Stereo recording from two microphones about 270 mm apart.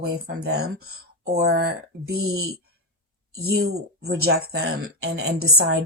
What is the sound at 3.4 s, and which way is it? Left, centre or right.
A woman's voice, right.